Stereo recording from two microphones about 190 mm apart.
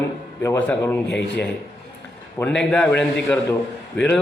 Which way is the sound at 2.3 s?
5° left (ahead or behind).